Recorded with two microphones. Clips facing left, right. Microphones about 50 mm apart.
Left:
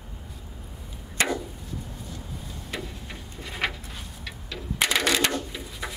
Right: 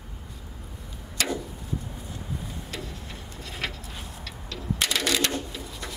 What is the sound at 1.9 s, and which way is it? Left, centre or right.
Vehicle, centre.